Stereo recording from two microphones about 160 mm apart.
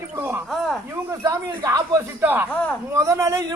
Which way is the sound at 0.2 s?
15° right (ahead or behind).